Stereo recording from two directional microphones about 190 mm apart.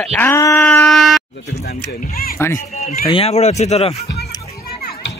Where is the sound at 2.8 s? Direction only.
40° left (ahead or behind).